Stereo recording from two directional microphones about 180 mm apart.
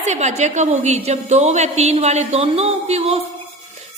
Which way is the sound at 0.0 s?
40° right (ahead or behind).